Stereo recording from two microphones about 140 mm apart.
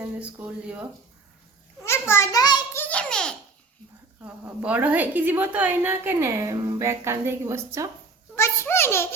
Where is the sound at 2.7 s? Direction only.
10° left (ahead or behind).